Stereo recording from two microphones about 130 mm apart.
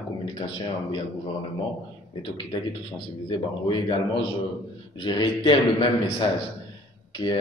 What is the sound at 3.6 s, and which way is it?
A man's voice, 40° left (ahead or behind).